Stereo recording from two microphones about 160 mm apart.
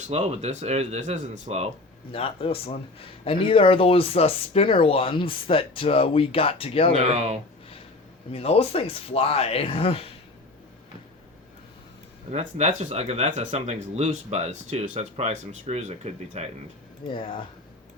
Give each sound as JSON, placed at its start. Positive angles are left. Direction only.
{"t": 0.1, "sound": "speech", "side_deg": -40}
{"t": 2.1, "sound": "speech", "side_deg": 35}
{"t": 7.0, "sound": "speech", "side_deg": -40}
{"t": 8.3, "sound": "speech", "side_deg": 35}
{"t": 12.3, "sound": "speech", "side_deg": -45}
{"t": 17.2, "sound": "speech", "side_deg": 30}